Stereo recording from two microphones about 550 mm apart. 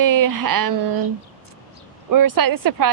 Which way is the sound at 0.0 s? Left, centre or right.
Right.